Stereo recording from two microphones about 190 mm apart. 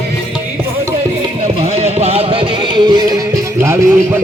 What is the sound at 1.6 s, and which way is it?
Music, 35° right (ahead or behind).